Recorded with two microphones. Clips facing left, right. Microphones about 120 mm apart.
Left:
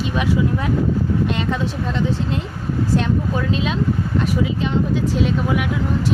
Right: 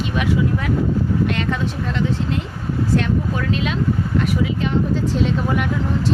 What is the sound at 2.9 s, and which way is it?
A woman's voice, 25° left (ahead or behind).